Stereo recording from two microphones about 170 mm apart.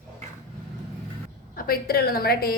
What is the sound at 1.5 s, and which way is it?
A woman's voice, 60° left (ahead or behind).